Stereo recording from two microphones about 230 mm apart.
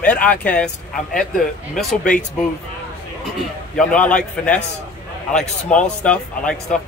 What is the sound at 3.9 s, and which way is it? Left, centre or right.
Speech, centre.